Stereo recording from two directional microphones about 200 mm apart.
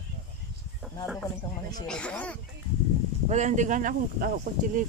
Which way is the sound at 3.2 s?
35° right (ahead or behind).